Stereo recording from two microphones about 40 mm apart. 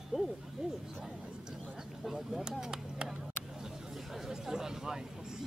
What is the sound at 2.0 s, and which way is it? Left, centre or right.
Speech, centre.